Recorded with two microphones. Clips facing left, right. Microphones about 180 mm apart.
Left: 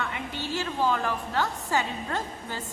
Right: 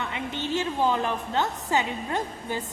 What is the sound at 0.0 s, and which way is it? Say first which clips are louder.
A woman's voice: right 2 dB; 20° right (ahead or behind).